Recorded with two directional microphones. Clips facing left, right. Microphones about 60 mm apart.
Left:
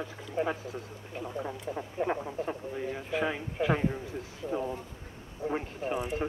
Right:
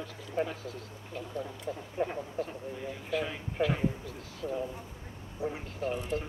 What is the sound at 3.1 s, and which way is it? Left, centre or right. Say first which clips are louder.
Speech: left 1 dB; left.